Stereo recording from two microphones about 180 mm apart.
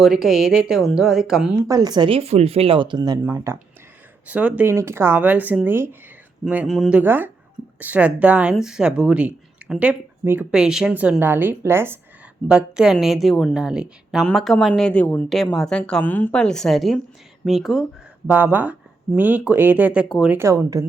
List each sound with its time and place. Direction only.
0.0 s a woman's voice: centre (ahead or behind)
1.6 s speech: 20° right (ahead or behind)
3.2 s a woman's voice: 15° right (ahead or behind)